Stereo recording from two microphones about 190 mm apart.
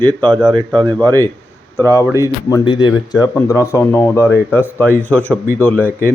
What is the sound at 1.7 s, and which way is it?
Speech, 15° left (ahead or behind).